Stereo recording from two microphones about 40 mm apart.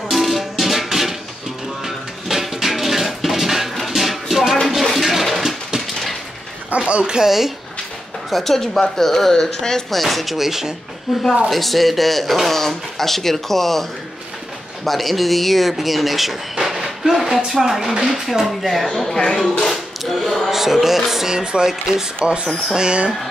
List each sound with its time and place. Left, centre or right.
0.1 s music: centre
2.2 s a sound: centre
3.7 s music: centre
4.6 s a sound: centre
6.9 s speech: right
7.2 s a woman's voice: centre
9.8 s speech: centre
14.9 s speech: centre
22.2 s speech: right